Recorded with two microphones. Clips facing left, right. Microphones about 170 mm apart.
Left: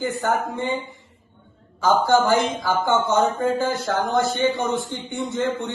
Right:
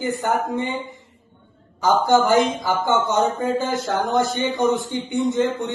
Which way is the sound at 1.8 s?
15° right (ahead or behind).